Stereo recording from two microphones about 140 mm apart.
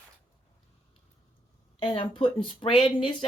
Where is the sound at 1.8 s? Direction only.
40° left (ahead or behind).